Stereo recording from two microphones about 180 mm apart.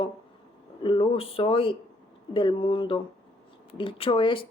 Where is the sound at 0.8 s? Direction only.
30° left (ahead or behind).